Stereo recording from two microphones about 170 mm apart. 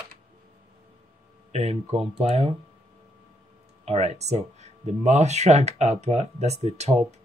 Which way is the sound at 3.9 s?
40° right (ahead or behind).